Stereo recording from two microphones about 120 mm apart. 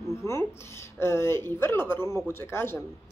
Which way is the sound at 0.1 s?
25° left (ahead or behind).